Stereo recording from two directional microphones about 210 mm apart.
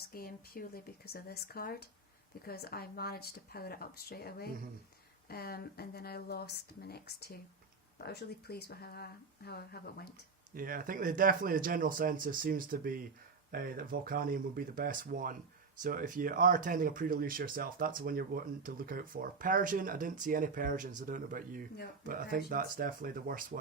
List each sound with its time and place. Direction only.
0.1 s speech: 45° left (ahead or behind)
10.5 s speech: 40° right (ahead or behind)